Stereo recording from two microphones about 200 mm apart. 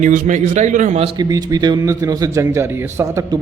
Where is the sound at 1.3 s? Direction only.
20° right (ahead or behind).